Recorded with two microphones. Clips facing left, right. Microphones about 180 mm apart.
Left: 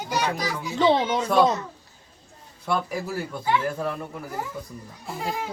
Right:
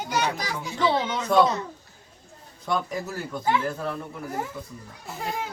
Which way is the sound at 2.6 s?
10° left (ahead or behind).